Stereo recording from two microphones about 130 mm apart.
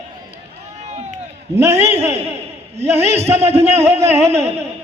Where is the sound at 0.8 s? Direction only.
60° right (ahead or behind).